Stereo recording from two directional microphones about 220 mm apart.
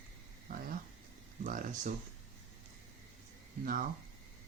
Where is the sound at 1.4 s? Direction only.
35° right (ahead or behind).